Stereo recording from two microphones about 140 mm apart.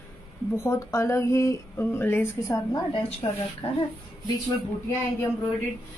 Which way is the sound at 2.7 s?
35° left (ahead or behind).